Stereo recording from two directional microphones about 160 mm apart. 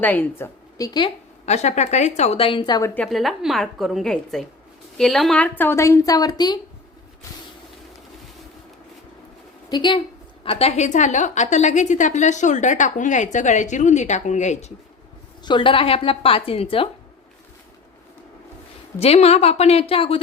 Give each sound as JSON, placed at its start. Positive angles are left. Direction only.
{"t": 0.0, "sound": "speech", "side_deg": 10}
{"t": 1.5, "sound": "a woman's voice", "side_deg": 45}
{"t": 3.1, "sound": "a woman's voice", "side_deg": 0}
{"t": 9.6, "sound": "a woman's voice", "side_deg": 30}
{"t": 10.4, "sound": "a woman's voice", "side_deg": 40}
{"t": 15.4, "sound": "a woman's voice", "side_deg": 30}
{"t": 18.9, "sound": "a woman's voice", "side_deg": 40}